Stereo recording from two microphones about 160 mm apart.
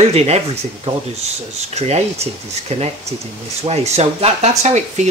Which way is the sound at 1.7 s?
40° right (ahead or behind).